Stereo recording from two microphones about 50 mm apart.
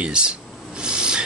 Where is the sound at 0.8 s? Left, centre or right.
Centre.